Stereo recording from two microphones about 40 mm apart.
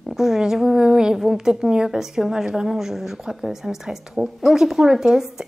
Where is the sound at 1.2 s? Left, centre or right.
Centre.